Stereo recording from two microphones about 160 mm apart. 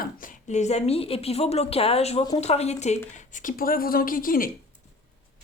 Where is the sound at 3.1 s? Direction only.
55° left (ahead or behind).